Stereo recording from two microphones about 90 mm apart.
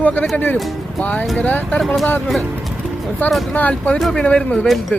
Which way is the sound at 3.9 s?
Centre (ahead or behind).